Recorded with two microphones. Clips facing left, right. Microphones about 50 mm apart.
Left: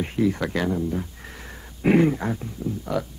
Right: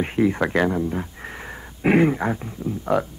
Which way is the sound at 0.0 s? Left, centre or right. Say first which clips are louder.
Right 3 dB; right.